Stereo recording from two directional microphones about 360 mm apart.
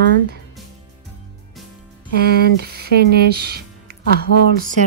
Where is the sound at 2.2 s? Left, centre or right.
Right.